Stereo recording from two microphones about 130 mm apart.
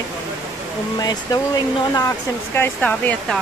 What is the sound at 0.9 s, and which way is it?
Speech, 30° left (ahead or behind).